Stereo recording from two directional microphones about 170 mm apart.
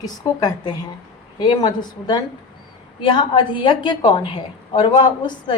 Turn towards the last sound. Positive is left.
turn(degrees=25)  # may be behind; listen again after turning